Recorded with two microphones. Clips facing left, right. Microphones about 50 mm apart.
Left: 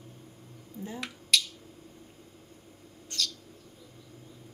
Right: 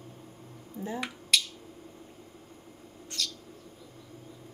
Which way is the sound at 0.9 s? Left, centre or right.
Centre.